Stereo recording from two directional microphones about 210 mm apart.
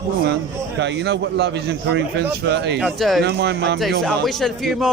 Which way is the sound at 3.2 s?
55° right (ahead or behind).